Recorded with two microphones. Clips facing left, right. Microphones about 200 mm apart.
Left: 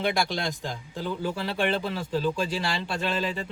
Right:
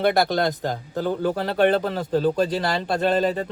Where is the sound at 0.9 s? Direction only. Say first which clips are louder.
Right 7 dB; 50° right (ahead or behind).